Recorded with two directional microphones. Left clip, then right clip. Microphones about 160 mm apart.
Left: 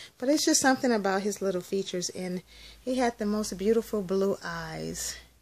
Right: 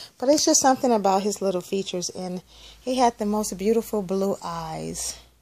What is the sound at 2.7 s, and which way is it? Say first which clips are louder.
Speech: right 7 dB; 30° left (ahead or behind).